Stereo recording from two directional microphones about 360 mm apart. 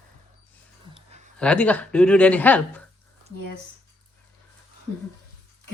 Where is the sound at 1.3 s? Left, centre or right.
Centre.